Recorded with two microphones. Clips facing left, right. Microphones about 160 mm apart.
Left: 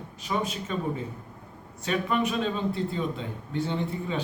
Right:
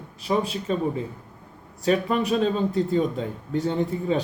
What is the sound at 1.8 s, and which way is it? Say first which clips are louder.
A man's voice: right 4 dB; 40° right (ahead or behind).